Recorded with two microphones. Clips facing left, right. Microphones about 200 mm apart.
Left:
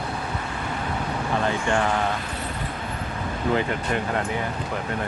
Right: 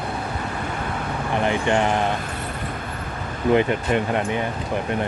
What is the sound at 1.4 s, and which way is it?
Speech, 20° right (ahead or behind).